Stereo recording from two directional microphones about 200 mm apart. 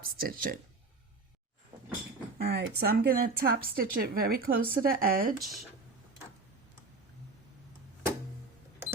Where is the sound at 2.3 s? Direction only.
55° right (ahead or behind).